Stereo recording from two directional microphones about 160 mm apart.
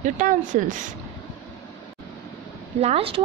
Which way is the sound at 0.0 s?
55° right (ahead or behind).